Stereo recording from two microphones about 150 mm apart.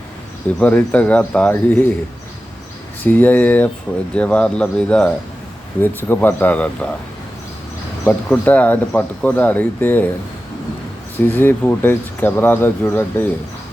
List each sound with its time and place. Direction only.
0.6 s speech: 10° left (ahead or behind)
3.0 s speech: 10° left (ahead or behind)
8.0 s speech: 10° left (ahead or behind)
11.3 s speech: 15° left (ahead or behind)